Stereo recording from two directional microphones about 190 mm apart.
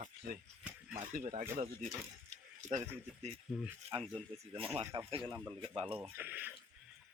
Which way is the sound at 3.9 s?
35° right (ahead or behind).